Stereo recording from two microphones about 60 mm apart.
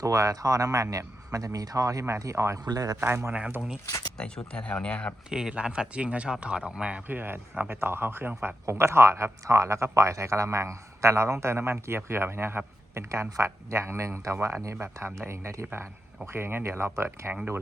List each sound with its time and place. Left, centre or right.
0.0 s speech: right
2.0 s speech: right
2.6 s a man's voice: right
3.0 s speech: right
4.2 s speech: centre
5.3 s speech: centre
7.1 s speech: right
8.6 s speech: right